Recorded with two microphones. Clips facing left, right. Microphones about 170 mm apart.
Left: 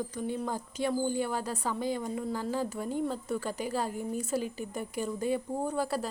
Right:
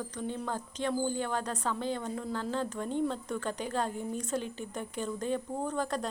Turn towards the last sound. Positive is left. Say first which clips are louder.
# left 1 dB
turn(degrees=5)  # may be behind; listen again after turning